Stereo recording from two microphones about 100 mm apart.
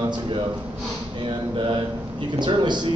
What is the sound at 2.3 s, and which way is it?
Speech, 50° right (ahead or behind).